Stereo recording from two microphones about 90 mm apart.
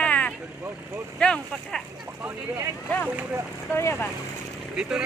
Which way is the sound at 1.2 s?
10° left (ahead or behind).